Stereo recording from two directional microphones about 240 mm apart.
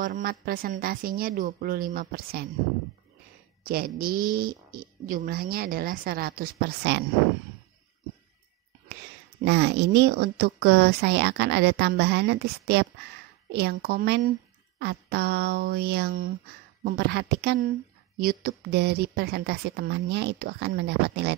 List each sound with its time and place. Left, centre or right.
0.0 s speech: right
3.6 s speech: right
9.4 s speech: right